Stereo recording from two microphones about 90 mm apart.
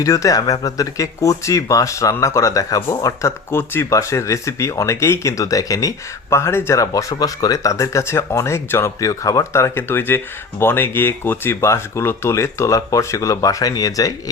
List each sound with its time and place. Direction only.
0.0 s speech: 40° left (ahead or behind)